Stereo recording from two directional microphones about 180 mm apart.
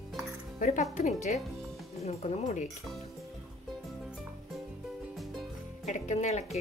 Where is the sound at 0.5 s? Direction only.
45° left (ahead or behind).